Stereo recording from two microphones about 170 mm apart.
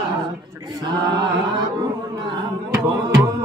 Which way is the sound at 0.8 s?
25° right (ahead or behind).